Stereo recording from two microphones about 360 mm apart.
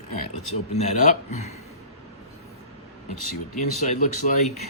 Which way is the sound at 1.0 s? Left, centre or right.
Centre.